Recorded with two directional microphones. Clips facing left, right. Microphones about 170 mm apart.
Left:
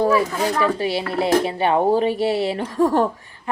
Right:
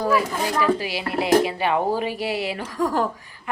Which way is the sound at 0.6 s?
30° left (ahead or behind).